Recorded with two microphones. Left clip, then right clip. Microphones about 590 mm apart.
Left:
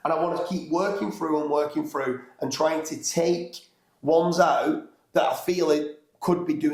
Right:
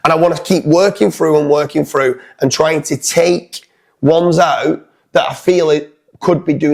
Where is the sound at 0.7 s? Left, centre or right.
Right.